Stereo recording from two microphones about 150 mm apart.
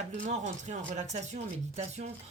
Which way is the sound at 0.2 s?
55° right (ahead or behind).